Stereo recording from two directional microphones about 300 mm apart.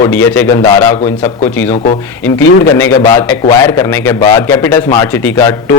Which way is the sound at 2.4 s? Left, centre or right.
Centre.